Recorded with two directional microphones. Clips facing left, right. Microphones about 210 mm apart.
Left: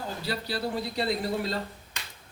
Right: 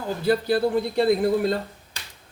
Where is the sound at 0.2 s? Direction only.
50° right (ahead or behind).